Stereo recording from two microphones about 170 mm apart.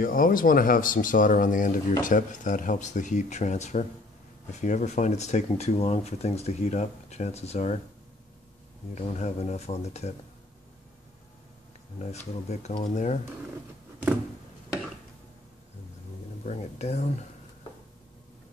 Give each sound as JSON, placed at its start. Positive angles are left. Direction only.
{"t": 0.0, "sound": "speech", "side_deg": 55}
{"t": 8.9, "sound": "speech", "side_deg": 45}
{"t": 12.0, "sound": "speech", "side_deg": 40}
{"t": 16.4, "sound": "speech", "side_deg": 40}